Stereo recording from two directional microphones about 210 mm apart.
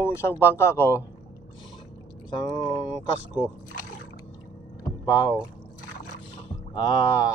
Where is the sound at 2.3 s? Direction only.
20° left (ahead or behind).